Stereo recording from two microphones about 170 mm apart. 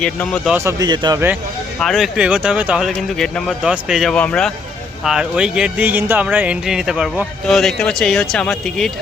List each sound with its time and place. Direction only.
0.0 s speech: 5° left (ahead or behind)
0.5 s speech: 15° right (ahead or behind)
1.8 s speech: centre (ahead or behind)